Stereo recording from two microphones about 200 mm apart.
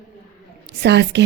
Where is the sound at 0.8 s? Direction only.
60° right (ahead or behind).